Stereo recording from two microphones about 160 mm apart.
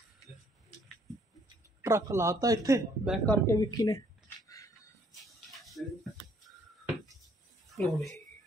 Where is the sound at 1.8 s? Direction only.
20° right (ahead or behind).